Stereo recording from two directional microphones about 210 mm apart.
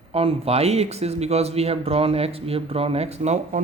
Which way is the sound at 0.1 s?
30° right (ahead or behind).